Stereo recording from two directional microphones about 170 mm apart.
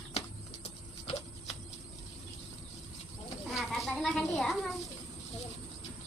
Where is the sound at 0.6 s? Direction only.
40° left (ahead or behind).